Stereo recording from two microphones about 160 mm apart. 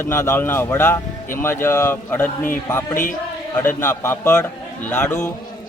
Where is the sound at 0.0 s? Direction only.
15° left (ahead or behind).